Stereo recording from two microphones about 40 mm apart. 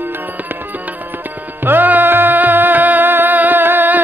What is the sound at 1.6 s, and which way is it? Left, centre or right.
Music, right.